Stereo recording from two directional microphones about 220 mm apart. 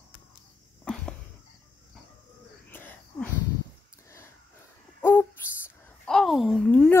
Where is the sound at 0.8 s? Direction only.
5° left (ahead or behind).